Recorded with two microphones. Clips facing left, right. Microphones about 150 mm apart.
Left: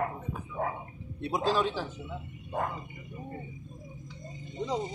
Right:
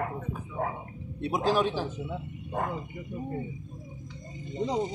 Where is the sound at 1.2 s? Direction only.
15° right (ahead or behind).